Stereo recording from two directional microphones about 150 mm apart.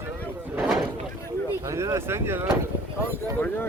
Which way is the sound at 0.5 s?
5° right (ahead or behind).